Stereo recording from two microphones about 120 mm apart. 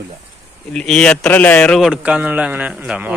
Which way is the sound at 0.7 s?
5° left (ahead or behind).